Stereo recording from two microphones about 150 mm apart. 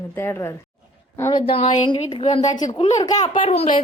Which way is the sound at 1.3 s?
40° left (ahead or behind).